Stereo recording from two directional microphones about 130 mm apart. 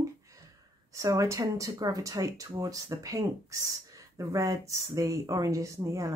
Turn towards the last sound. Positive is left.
turn(degrees=-25)  # may be behind; listen again after turning